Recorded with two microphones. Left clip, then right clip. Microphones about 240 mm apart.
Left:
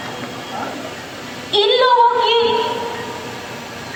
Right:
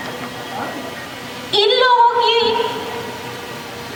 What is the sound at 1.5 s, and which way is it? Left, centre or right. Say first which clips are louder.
Female singing: even; right.